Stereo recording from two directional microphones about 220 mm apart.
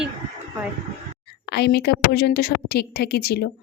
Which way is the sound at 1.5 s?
45° left (ahead or behind).